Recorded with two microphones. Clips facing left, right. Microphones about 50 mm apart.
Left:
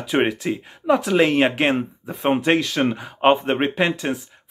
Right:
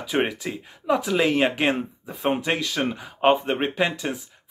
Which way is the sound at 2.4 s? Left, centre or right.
Left.